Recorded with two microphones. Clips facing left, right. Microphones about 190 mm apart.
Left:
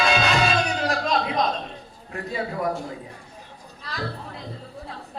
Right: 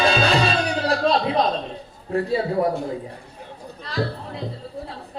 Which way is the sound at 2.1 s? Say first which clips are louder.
Right 8 dB; 35° right (ahead or behind).